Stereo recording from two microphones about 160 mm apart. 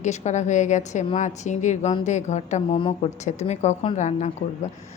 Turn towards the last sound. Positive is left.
turn(degrees=50)  # may be behind; listen again after turning